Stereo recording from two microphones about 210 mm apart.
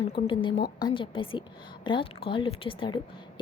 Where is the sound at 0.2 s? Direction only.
25° left (ahead or behind).